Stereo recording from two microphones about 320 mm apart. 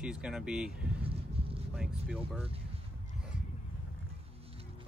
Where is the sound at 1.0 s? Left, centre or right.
Centre.